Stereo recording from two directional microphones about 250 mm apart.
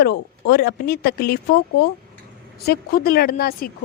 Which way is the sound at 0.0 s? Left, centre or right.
Left.